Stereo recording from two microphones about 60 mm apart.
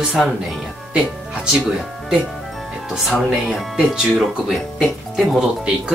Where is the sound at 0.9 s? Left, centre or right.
Centre.